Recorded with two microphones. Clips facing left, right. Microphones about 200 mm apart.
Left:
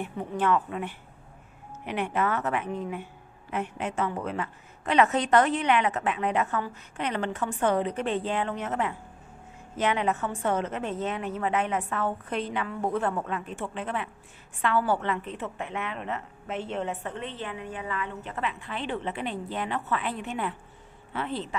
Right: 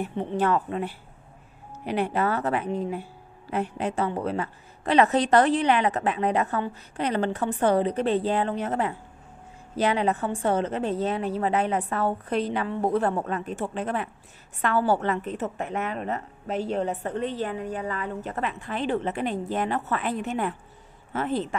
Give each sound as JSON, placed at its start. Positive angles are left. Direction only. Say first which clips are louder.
{"t": 0.0, "sound": "a woman's voice", "louder": "right 3 dB", "side_deg": -30}